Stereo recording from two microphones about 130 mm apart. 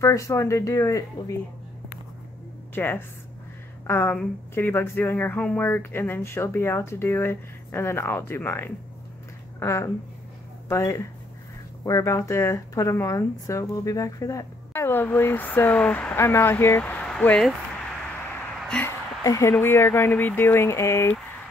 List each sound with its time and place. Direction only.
0.0 s speech: 20° left (ahead or behind)
2.7 s speech: 15° left (ahead or behind)
18.8 s a sound: 20° left (ahead or behind)
19.6 s speech: 20° left (ahead or behind)